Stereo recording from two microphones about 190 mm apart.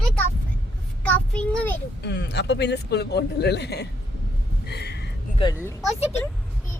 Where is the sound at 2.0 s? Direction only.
65° left (ahead or behind).